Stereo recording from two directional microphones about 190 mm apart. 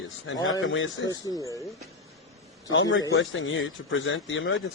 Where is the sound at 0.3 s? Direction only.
90° left.